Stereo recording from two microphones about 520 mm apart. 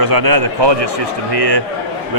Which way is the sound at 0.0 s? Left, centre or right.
Right.